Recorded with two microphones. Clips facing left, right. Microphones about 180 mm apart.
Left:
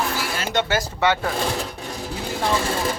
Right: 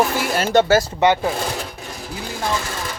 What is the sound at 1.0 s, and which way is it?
Speech, 15° right (ahead or behind).